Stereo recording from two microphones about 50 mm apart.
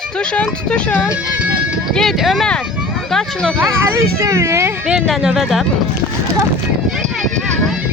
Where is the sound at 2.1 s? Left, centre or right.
Centre.